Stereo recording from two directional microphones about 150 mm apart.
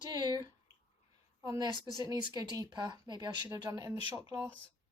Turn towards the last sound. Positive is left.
turn(degrees=-15)  # may be behind; listen again after turning